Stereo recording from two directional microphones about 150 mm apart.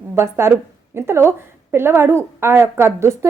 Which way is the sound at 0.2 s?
15° right (ahead or behind).